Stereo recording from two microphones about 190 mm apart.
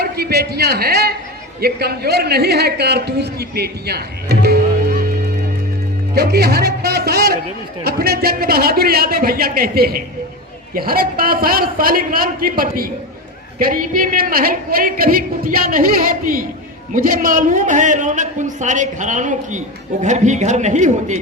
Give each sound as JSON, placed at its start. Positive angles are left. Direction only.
{"t": 0.0, "sound": "a man's voice", "side_deg": -55}